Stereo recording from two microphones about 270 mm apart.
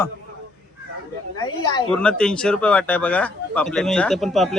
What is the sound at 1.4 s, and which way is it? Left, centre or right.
Speech, centre.